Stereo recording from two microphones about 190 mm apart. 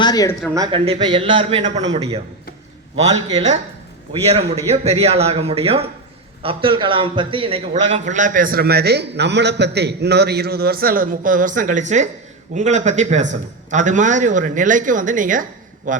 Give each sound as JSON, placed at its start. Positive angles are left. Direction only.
{"t": 0.0, "sound": "speech", "side_deg": 20}
{"t": 0.5, "sound": "a man's voice", "side_deg": -20}